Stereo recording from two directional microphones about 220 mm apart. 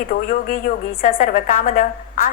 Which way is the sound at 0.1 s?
40° left (ahead or behind).